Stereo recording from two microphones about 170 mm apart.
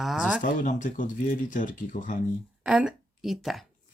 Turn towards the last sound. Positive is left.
turn(degrees=0)  # may be behind; listen again after turning